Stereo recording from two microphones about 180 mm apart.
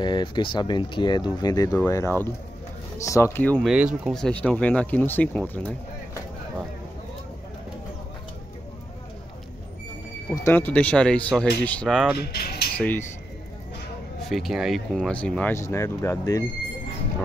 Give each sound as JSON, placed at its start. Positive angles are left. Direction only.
{"t": 0.0, "sound": "speech", "side_deg": 25}
{"t": 3.6, "sound": "speech", "side_deg": -5}
{"t": 10.3, "sound": "speech", "side_deg": 15}
{"t": 12.2, "sound": "speech", "side_deg": 60}
{"t": 12.7, "sound": "speech", "side_deg": 10}
{"t": 14.2, "sound": "speech", "side_deg": 0}